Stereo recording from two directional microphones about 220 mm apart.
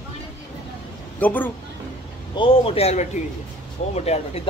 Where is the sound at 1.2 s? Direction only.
5° left (ahead or behind).